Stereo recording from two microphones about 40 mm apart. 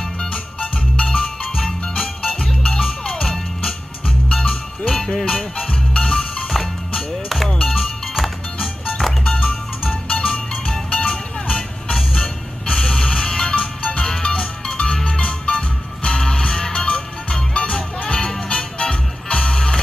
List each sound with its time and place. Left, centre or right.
0.3 s music: left; by 8.6 s centre
9.2 s music: left